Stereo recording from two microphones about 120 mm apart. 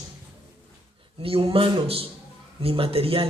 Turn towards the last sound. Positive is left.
turn(degrees=-50)  # may be behind; listen again after turning